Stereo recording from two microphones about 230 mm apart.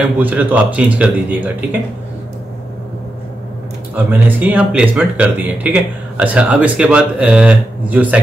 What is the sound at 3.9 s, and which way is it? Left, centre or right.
Speech, centre.